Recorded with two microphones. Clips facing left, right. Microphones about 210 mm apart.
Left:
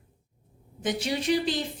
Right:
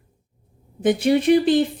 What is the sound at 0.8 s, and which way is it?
Speech, 55° right (ahead or behind).